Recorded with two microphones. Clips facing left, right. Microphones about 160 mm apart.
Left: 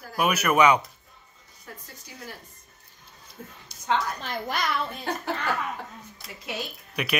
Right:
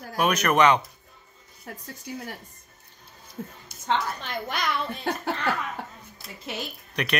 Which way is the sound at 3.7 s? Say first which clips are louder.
Right 2 dB; 50° right (ahead or behind).